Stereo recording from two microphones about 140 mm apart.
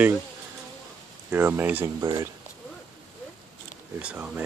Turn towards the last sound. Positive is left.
turn(degrees=-10)  # may be behind; listen again after turning